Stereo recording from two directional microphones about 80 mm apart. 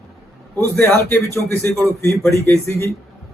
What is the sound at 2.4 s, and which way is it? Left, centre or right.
Speech, left.